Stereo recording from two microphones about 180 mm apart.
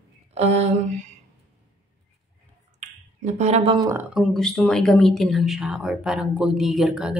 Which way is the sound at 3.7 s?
20° right (ahead or behind).